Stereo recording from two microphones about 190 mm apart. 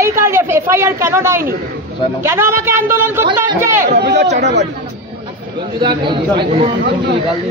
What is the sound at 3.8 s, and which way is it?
Speech, 60° right (ahead or behind).